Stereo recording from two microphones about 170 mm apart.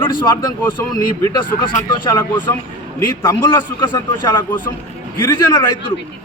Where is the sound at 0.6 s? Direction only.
20° left (ahead or behind).